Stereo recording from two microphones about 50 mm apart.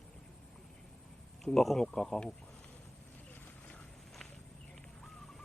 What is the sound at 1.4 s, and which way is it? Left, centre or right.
Speech, centre.